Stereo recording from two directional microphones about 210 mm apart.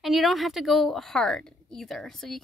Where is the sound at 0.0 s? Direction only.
Centre (ahead or behind).